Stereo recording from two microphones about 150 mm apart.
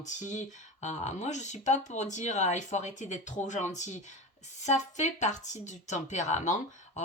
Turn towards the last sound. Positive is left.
turn(degrees=50)  # may be behind; listen again after turning